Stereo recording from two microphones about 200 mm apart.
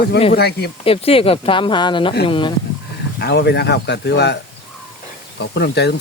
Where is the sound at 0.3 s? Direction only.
50° left (ahead or behind).